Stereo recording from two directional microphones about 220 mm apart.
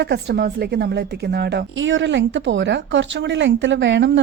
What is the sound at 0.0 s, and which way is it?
A woman's voice, 50° right (ahead or behind).